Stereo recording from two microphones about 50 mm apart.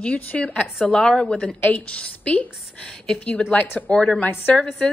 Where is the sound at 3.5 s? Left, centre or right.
Left.